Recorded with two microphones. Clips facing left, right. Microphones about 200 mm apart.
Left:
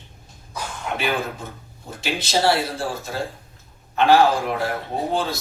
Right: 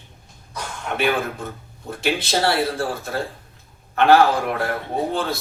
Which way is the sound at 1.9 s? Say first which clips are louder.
Right 3 dB; 60° right (ahead or behind).